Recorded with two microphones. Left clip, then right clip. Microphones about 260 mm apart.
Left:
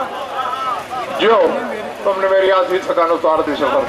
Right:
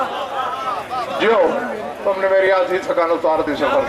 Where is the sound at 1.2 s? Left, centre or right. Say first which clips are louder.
Left 3 dB; centre.